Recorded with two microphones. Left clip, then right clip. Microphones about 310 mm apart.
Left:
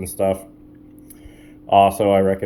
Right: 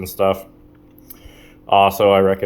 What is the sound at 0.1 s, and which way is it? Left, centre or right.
Speech, centre.